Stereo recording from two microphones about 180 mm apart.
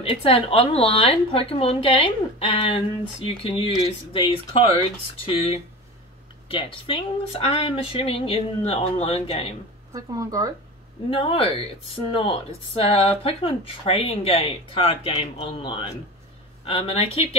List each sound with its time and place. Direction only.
0.0 s speech: 30° left (ahead or behind)
9.9 s speech: 20° right (ahead or behind)
11.1 s speech: 30° left (ahead or behind)